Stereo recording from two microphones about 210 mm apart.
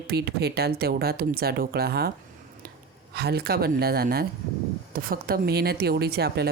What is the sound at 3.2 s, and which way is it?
A woman's voice, 50° right (ahead or behind).